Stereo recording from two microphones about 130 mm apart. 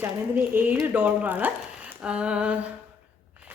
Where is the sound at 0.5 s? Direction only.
15° right (ahead or behind).